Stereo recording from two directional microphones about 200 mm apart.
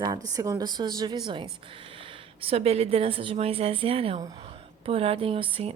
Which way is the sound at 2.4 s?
30° right (ahead or behind).